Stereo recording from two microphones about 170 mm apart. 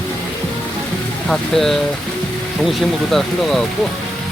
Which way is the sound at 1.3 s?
Centre (ahead or behind).